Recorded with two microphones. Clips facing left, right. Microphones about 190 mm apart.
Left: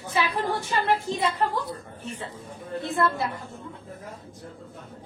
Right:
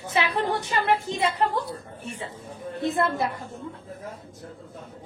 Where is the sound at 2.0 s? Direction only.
10° right (ahead or behind).